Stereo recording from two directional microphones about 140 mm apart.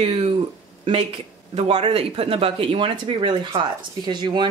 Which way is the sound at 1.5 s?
50° right (ahead or behind).